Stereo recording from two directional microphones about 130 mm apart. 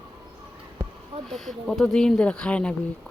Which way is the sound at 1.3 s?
5° left (ahead or behind).